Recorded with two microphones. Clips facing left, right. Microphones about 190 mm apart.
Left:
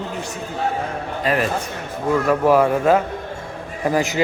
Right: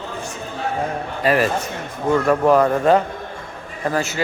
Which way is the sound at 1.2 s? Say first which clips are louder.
Right 3 dB; 5° right (ahead or behind).